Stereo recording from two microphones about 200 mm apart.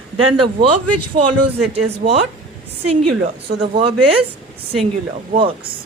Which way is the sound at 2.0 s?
40° right (ahead or behind).